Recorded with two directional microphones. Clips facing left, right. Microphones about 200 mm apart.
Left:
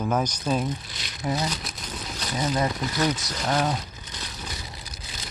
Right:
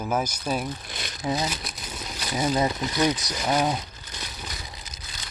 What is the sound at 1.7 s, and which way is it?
Speech, centre (ahead or behind).